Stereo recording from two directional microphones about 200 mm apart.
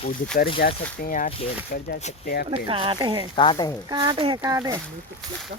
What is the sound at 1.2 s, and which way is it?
Speech, 30° left (ahead or behind).